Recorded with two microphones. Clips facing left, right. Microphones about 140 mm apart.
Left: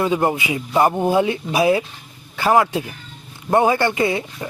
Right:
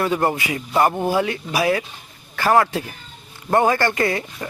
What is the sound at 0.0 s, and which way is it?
Speech, 15° left (ahead or behind).